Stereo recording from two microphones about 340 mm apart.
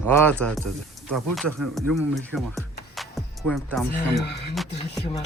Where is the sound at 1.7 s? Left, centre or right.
Centre.